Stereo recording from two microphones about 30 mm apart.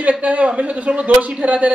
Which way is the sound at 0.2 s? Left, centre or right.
Right.